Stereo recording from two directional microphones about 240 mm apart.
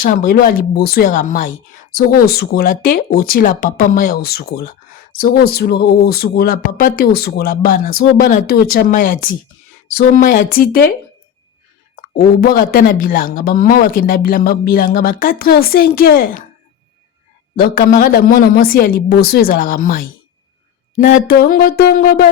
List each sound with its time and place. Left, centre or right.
0.0 s speech: left
11.9 s speech: left
17.6 s speech: left